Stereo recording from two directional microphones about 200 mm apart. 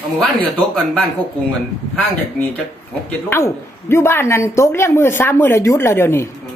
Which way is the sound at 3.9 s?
10° left (ahead or behind).